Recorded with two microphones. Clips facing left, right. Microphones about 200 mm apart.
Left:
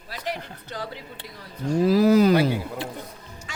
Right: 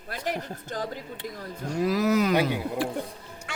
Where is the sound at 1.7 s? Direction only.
30° left (ahead or behind).